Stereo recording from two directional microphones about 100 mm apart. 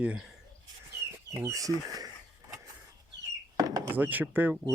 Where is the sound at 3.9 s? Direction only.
15° right (ahead or behind).